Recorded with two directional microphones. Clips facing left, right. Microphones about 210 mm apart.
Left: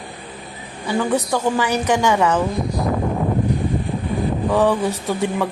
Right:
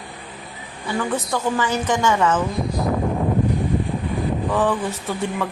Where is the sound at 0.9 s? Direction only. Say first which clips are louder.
Left 4 dB; 15° left (ahead or behind).